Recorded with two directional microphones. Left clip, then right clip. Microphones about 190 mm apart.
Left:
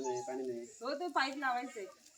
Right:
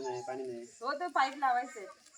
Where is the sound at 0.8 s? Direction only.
15° right (ahead or behind).